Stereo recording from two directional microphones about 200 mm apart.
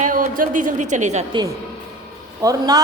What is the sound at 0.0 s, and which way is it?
A woman's voice, 40° right (ahead or behind).